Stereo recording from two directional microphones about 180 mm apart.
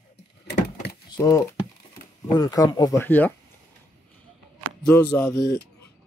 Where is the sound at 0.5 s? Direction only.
65° left (ahead or behind).